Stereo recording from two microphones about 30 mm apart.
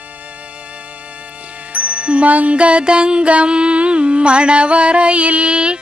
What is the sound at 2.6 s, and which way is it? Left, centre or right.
Music, right.